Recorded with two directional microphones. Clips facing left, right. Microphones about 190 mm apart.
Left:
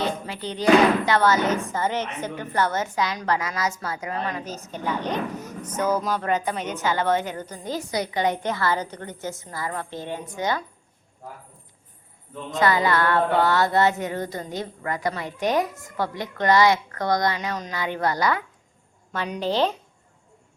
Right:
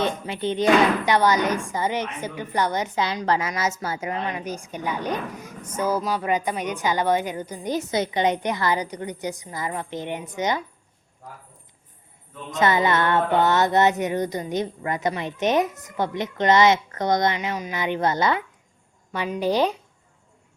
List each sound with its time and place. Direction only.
0.0 s music: 20° right (ahead or behind)
4.3 s a woman's voice: 15° right (ahead or behind)
12.5 s music: 20° right (ahead or behind)
19.4 s a woman's voice: 10° right (ahead or behind)